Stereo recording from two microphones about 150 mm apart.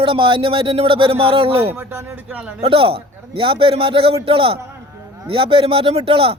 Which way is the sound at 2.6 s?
40° right (ahead or behind).